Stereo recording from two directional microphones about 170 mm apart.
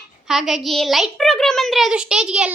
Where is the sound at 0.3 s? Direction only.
Centre (ahead or behind).